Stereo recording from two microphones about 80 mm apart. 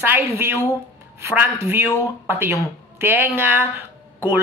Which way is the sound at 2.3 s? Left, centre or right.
Right.